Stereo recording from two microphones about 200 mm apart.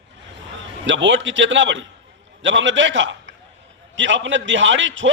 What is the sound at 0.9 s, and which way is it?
A man's voice, 65° right (ahead or behind).